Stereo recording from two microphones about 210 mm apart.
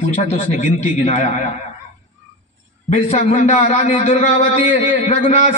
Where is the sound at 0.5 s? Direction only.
60° right (ahead or behind).